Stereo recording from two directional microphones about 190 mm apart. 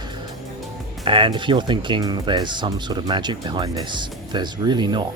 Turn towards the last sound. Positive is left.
turn(degrees=-25)  # may be behind; listen again after turning